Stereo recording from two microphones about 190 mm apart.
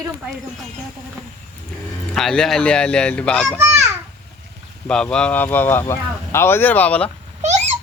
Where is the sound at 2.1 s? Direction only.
Centre (ahead or behind).